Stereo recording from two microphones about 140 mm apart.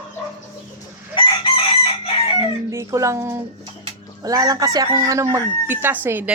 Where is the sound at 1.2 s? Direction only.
35° left (ahead or behind).